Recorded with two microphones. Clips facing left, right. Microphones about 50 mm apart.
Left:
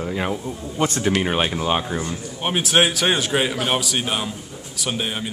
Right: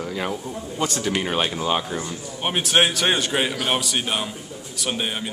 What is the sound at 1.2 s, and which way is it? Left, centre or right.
Speech, centre.